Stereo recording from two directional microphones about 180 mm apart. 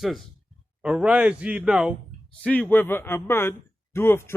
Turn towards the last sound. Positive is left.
turn(degrees=15)  # may be behind; listen again after turning